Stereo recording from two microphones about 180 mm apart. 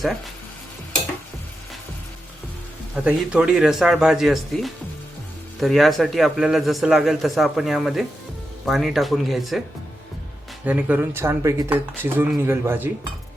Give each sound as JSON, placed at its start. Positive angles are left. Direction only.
{"t": 2.9, "sound": "a man's voice", "side_deg": -5}
{"t": 10.7, "sound": "speech", "side_deg": -10}